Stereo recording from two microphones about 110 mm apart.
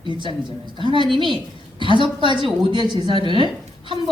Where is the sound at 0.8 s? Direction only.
45° right (ahead or behind).